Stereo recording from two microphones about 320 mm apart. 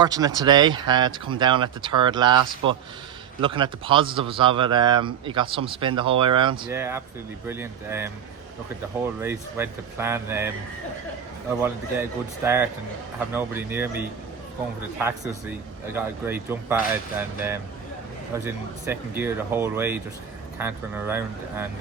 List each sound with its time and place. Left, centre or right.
0.0 s a man's voice: centre
9.2 s a man's voice: centre
11.6 s a man's voice: centre